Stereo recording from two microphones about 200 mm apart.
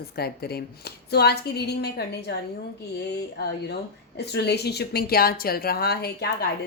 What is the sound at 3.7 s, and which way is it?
A woman's voice, 55° left (ahead or behind).